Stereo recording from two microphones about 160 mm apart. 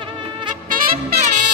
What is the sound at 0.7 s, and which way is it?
Music, 50° right (ahead or behind).